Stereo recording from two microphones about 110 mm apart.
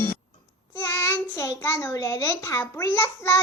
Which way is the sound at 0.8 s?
30° left (ahead or behind).